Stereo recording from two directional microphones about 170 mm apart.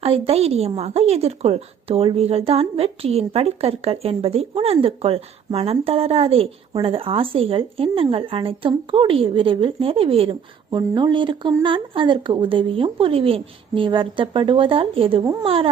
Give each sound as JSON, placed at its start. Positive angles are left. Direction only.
{"t": 0.0, "sound": "a woman's voice", "side_deg": -35}
{"t": 15.2, "sound": "a woman's voice", "side_deg": -20}
{"t": 15.4, "sound": "a woman's voice", "side_deg": -35}